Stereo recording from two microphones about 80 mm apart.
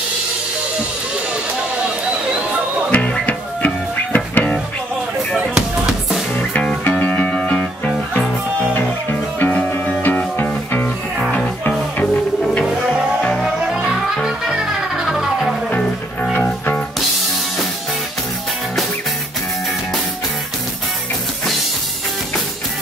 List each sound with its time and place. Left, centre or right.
2.9 s music: centre
5.5 s music: centre
7.0 s music: centre
13.2 s music: centre
16.4 s music: centre